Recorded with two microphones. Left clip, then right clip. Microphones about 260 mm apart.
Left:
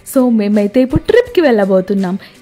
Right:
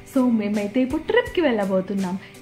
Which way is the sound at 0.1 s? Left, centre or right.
Left.